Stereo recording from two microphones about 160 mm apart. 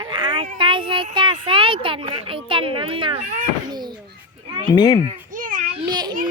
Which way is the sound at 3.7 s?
25° right (ahead or behind).